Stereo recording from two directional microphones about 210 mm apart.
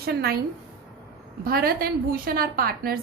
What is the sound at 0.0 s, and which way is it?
Speech, 50° right (ahead or behind).